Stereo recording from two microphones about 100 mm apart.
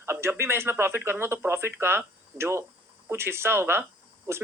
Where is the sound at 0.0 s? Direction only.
25° right (ahead or behind).